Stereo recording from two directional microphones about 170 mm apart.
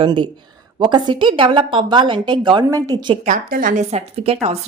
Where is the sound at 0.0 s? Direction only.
25° right (ahead or behind).